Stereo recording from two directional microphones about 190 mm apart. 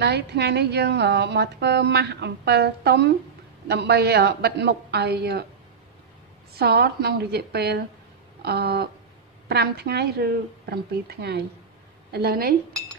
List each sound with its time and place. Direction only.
0.0 s speech: 60° right (ahead or behind)
6.5 s a woman's voice: 55° right (ahead or behind)